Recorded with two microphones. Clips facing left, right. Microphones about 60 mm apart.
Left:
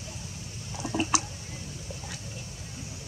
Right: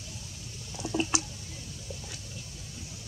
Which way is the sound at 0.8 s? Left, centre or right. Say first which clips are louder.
Left 2 dB; left.